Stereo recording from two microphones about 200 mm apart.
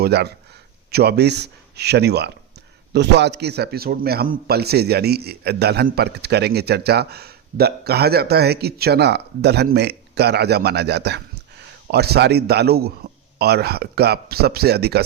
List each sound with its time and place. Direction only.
0.0 s a man's voice: 55° right (ahead or behind)